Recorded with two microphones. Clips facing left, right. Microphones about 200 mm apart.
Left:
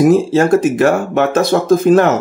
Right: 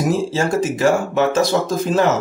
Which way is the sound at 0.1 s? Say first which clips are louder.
Left 8 dB; 60° left (ahead or behind).